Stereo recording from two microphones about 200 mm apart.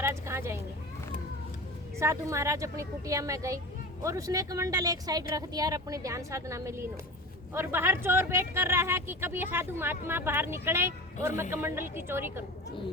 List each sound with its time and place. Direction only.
0.0 s speech: 15° right (ahead or behind)
2.0 s speech: 15° right (ahead or behind)